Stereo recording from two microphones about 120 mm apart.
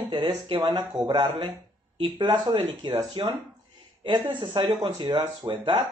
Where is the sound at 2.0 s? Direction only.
40° right (ahead or behind).